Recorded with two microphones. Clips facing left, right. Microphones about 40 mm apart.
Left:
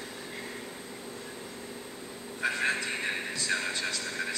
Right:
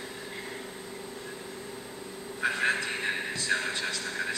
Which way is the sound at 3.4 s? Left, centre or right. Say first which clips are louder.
Right 1 dB; right.